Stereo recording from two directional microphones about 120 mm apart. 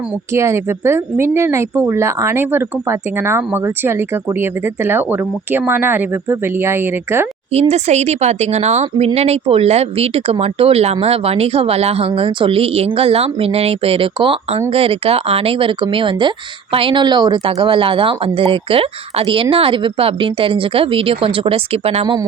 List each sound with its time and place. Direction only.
0.3 s speech: 20° right (ahead or behind)
7.5 s speech: 60° right (ahead or behind)
22.0 s speech: 35° right (ahead or behind)